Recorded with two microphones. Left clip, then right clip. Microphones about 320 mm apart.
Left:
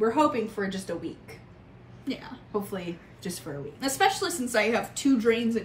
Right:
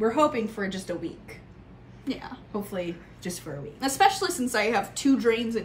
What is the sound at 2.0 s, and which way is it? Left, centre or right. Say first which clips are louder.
Speech: right 1 dB; centre.